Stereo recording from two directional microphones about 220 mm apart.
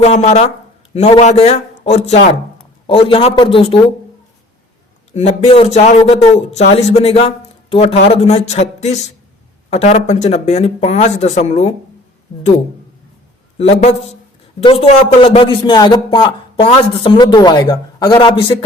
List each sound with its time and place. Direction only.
0.0 s a man's voice: 30° left (ahead or behind)
5.1 s a man's voice: 30° left (ahead or behind)
13.6 s a man's voice: 30° left (ahead or behind)